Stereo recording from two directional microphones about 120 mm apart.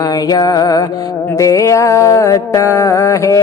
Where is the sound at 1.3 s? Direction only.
25° left (ahead or behind).